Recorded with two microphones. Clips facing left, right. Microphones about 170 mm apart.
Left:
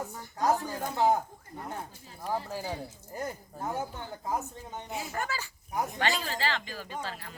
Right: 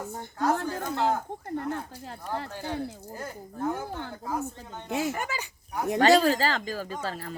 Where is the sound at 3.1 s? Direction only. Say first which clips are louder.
Left 4 dB; 15° left (ahead or behind).